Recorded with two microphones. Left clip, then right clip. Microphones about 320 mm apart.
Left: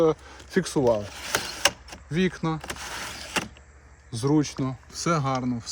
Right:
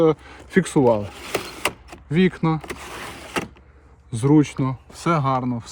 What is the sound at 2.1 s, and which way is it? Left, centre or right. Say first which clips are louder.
Speech: right 6 dB; right.